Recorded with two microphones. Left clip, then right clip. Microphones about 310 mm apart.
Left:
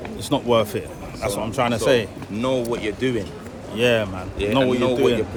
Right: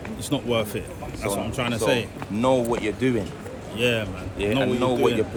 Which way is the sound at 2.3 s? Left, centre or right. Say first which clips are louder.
Right 2 dB; centre.